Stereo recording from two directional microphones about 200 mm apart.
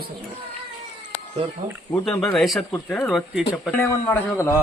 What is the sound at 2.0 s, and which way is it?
Speech, 5° left (ahead or behind).